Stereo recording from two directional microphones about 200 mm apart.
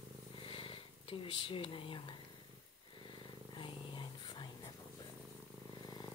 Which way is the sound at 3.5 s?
25° left (ahead or behind).